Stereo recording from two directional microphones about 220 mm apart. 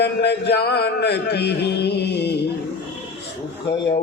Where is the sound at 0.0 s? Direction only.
50° left (ahead or behind).